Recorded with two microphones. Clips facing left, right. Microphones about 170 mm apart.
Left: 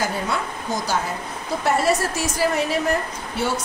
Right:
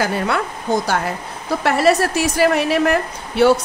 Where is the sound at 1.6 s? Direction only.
75° right (ahead or behind).